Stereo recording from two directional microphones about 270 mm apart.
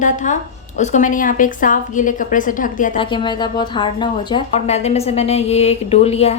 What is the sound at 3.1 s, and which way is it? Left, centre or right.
A woman's voice, centre.